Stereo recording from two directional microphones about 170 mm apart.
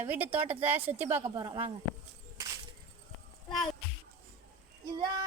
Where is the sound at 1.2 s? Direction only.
25° right (ahead or behind).